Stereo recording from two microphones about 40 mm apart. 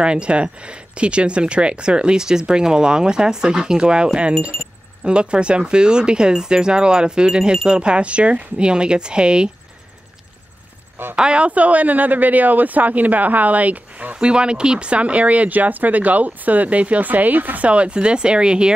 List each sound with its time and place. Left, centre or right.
0.0 s speech: right
11.1 s speech: right
14.1 s speech: right
17.6 s speech: right